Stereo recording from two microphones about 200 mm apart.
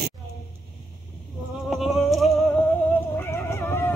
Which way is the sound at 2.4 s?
10° left (ahead or behind).